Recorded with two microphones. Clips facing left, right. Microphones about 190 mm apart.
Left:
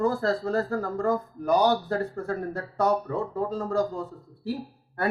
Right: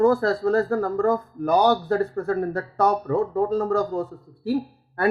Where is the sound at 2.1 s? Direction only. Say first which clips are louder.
Right 6 dB; 60° right (ahead or behind).